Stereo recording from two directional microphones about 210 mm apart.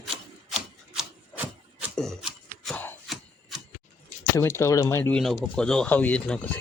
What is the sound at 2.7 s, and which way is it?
Chopping, 5° left (ahead or behind).